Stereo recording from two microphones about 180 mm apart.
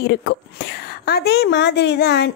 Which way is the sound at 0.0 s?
70° left (ahead or behind).